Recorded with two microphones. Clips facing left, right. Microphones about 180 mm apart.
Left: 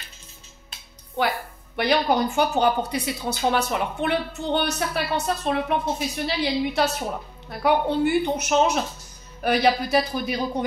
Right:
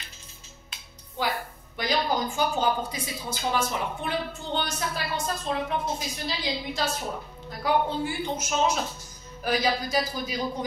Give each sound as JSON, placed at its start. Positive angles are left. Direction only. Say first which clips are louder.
{"t": 1.8, "sound": "a woman's voice", "louder": "left 6 dB", "side_deg": 65}